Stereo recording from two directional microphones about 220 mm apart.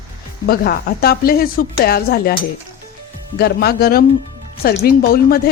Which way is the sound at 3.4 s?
45° left (ahead or behind).